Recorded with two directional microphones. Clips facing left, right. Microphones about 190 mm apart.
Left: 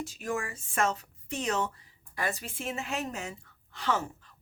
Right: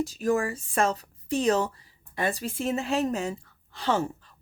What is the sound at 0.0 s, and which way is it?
Speech, 40° right (ahead or behind).